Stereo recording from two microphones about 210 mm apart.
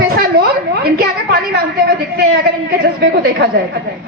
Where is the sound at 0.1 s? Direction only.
45° right (ahead or behind).